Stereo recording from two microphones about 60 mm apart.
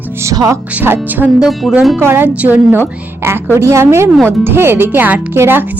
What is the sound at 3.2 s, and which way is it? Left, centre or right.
A woman's voice, right.